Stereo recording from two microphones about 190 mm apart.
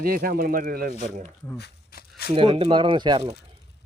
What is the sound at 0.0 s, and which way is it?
Speech, 50° right (ahead or behind).